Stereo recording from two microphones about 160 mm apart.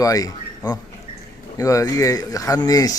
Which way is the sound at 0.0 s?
20° left (ahead or behind).